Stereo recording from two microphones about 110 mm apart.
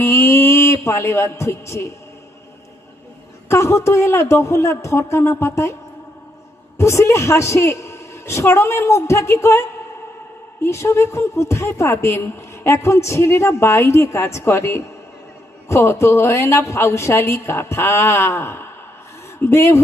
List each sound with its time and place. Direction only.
0.0 s speech: 25° left (ahead or behind)
3.5 s speech: 25° left (ahead or behind)
6.7 s speech: 25° left (ahead or behind)